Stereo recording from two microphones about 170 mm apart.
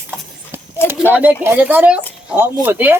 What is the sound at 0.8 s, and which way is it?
A man's voice, 10° right (ahead or behind).